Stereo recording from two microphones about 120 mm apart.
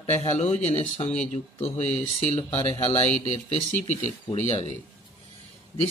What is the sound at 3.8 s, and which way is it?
Speech, 75° left (ahead or behind).